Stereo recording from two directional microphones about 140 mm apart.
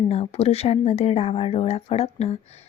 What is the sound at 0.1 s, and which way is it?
Speech, 45° left (ahead or behind).